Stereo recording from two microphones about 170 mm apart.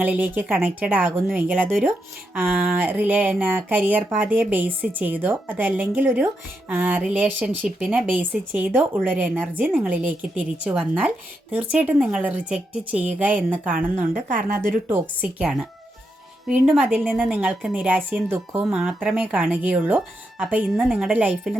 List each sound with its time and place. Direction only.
0.0 s a woman's voice: 10° right (ahead or behind)
13.7 s a woman's voice: 50° right (ahead or behind)
14.8 s a woman's voice: 10° right (ahead or behind)